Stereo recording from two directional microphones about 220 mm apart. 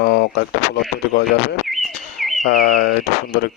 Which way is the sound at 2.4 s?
45° left (ahead or behind).